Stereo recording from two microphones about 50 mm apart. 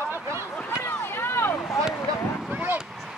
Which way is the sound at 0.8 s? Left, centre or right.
Left.